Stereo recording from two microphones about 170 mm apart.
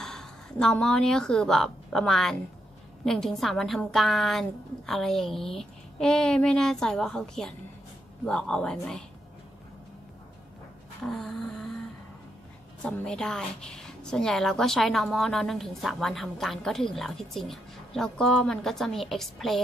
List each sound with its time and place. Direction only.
0.0 s a woman's voice: 5° left (ahead or behind)
11.1 s a woman's voice: 5° left (ahead or behind)
12.8 s a woman's voice: 5° left (ahead or behind)